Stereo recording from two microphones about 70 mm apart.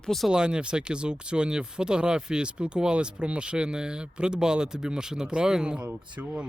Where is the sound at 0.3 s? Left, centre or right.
Centre.